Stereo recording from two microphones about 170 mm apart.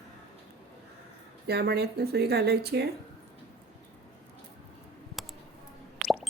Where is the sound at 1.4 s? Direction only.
70° right (ahead or behind).